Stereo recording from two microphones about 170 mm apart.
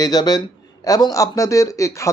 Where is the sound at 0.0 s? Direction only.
20° left (ahead or behind).